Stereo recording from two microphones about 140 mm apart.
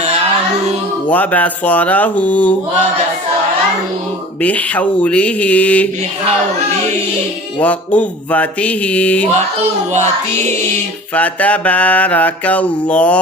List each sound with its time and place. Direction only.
1.1 s mantra: 10° left (ahead or behind)
4.4 s mantra: 10° left (ahead or behind)
7.6 s mantra: 10° left (ahead or behind)
9.9 s music: 55° right (ahead or behind)
11.1 s mantra: 10° left (ahead or behind)